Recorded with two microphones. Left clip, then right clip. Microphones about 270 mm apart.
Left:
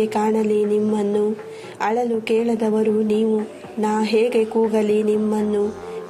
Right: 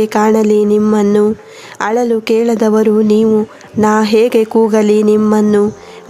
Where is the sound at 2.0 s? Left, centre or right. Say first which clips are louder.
Right 10 dB; right.